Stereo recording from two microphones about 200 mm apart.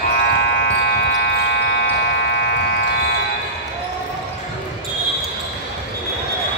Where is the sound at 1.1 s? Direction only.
55° left (ahead or behind).